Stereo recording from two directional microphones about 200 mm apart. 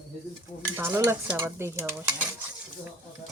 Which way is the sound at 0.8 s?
10° right (ahead or behind).